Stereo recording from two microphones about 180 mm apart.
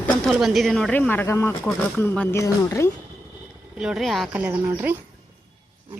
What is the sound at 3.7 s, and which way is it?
Speech, centre (ahead or behind).